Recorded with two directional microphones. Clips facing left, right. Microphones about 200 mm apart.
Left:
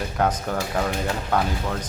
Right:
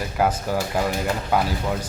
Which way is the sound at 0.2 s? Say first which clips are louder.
Right 2 dB; 5° right (ahead or behind).